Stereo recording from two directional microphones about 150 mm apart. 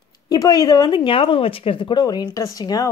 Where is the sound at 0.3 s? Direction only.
25° left (ahead or behind).